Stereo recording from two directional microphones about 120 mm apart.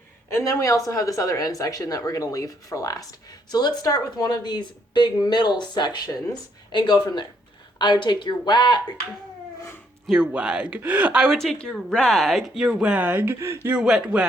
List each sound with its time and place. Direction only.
0.3 s a man's voice: 25° left (ahead or behind)
10.1 s speech: 10° right (ahead or behind)
11.3 s speech: 5° left (ahead or behind); by 13.7 s 20° right (ahead or behind)
13.7 s speech: 5° right (ahead or behind)